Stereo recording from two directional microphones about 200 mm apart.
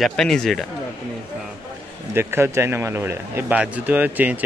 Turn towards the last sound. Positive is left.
turn(degrees=-10)  # may be behind; listen again after turning